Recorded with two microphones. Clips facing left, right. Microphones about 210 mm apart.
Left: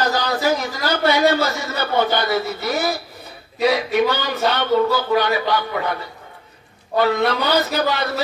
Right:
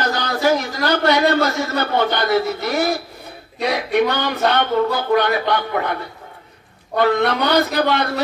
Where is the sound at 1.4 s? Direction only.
55° right (ahead or behind).